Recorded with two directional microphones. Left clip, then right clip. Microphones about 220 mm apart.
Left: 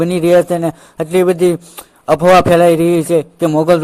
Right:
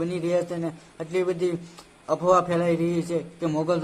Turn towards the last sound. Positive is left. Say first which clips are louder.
# left 14 dB
turn(degrees=35)  # may be behind; listen again after turning